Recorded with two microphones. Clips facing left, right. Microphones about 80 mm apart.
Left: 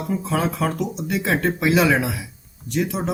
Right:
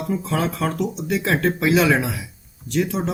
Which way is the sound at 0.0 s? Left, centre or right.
Centre.